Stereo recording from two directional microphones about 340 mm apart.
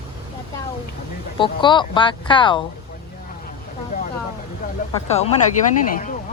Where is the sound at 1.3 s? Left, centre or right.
Centre.